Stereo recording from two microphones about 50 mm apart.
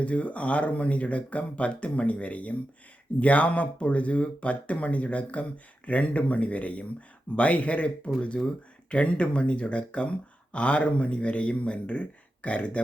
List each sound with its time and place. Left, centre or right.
0.0 s speech: left